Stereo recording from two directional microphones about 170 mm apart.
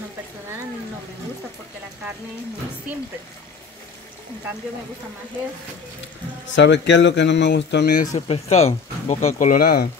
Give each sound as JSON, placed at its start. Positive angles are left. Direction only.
{"t": 6.5, "sound": "speech", "side_deg": 90}
{"t": 8.3, "sound": "speech", "side_deg": 40}